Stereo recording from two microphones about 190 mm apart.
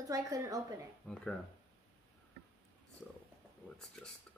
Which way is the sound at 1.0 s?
10° left (ahead or behind).